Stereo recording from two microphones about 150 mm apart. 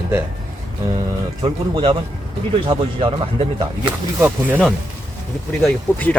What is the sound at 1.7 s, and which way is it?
Speech, 35° right (ahead or behind).